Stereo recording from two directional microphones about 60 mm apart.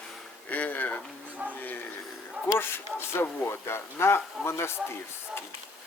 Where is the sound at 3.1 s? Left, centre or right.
Left.